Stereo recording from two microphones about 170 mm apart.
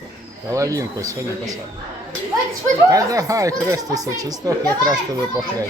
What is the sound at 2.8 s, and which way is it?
Speech, 20° right (ahead or behind).